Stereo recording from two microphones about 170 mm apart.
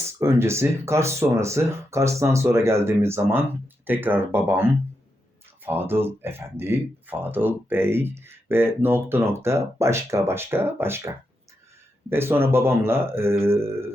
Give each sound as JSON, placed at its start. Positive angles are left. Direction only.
{"t": 0.2, "sound": "speech", "side_deg": -15}